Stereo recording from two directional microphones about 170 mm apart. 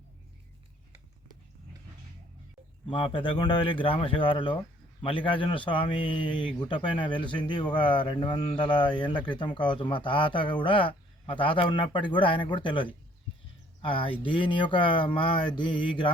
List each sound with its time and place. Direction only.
2.8 s speech: 30° left (ahead or behind)